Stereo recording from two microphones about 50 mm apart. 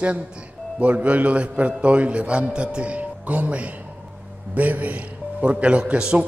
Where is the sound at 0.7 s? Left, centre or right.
Right.